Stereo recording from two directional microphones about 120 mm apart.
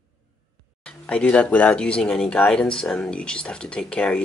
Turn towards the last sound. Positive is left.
turn(degrees=10)  # may be behind; listen again after turning